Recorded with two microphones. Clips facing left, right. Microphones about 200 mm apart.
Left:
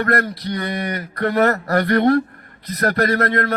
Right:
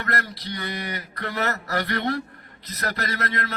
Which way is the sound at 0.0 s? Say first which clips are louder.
Left 10 dB; 55° left (ahead or behind).